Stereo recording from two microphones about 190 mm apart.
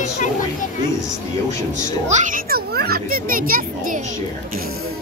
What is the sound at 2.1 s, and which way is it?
A child's voice, 40° right (ahead or behind).